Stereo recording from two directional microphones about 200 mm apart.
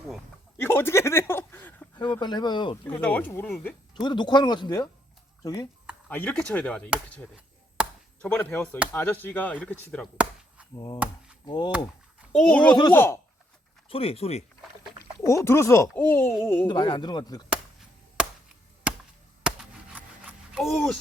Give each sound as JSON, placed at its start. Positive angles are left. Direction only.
{"t": 0.5, "sound": "speech", "side_deg": 10}
{"t": 2.9, "sound": "speech", "side_deg": 5}
{"t": 4.0, "sound": "speech", "side_deg": 20}
{"t": 7.3, "sound": "chopping", "side_deg": -5}
{"t": 8.3, "sound": "speech", "side_deg": 10}
{"t": 10.8, "sound": "speech", "side_deg": 20}
{"t": 12.3, "sound": "speech", "side_deg": 5}
{"t": 13.9, "sound": "speech", "side_deg": 30}
{"t": 15.2, "sound": "speech", "side_deg": 15}
{"t": 16.6, "sound": "speech", "side_deg": 20}
{"t": 18.2, "sound": "chop", "side_deg": -5}
{"t": 20.5, "sound": "speech", "side_deg": 0}